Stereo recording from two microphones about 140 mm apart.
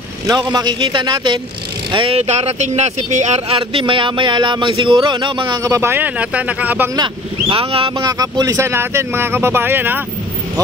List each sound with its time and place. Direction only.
0.3 s speech: 30° right (ahead or behind); by 6.9 s 10° right (ahead or behind)
7.0 s speech: 40° right (ahead or behind)
7.9 s speech: 25° right (ahead or behind)